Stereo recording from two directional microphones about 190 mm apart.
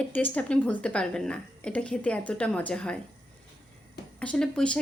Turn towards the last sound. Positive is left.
turn(degrees=5)  # may be behind; listen again after turning